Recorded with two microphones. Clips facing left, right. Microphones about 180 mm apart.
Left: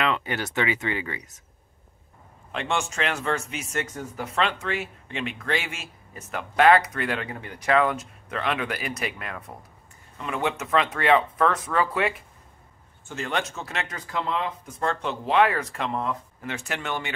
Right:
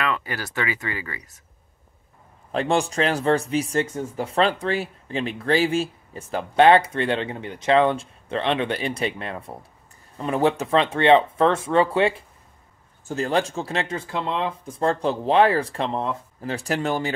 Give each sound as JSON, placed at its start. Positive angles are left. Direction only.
{"t": 0.0, "sound": "speech", "side_deg": 20}
{"t": 2.5, "sound": "speech", "side_deg": -35}